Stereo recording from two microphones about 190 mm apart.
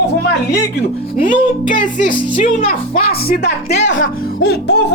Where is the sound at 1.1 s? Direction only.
45° left (ahead or behind).